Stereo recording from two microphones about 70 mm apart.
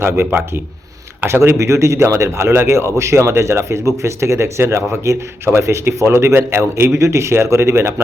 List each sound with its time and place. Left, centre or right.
0.0 s speech: right